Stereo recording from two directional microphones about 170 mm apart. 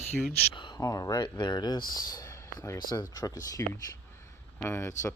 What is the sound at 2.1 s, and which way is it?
Speech, 20° left (ahead or behind).